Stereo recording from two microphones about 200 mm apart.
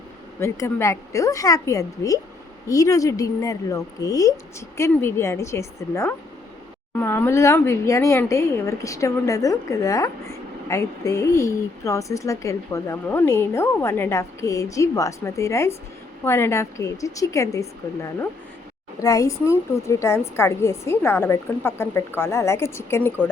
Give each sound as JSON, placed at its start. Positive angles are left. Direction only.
{"t": 0.3, "sound": "a woman's voice", "side_deg": 15}